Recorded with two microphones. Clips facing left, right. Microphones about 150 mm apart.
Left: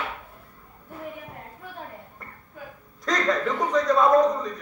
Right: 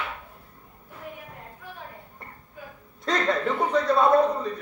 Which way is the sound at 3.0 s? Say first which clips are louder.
Even; 30° right (ahead or behind).